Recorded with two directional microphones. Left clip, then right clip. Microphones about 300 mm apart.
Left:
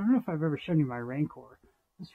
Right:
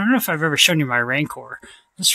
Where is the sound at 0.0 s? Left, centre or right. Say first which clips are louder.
Right 11 dB; right.